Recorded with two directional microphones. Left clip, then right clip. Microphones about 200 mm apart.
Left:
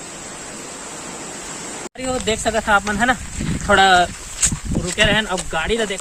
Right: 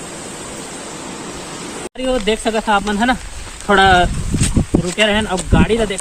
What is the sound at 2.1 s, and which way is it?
Speech, 15° left (ahead or behind).